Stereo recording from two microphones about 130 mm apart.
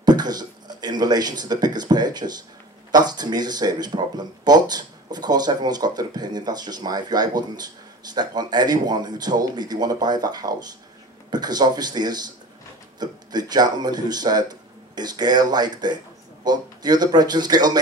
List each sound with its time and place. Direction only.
0.0 s speech: 30° right (ahead or behind)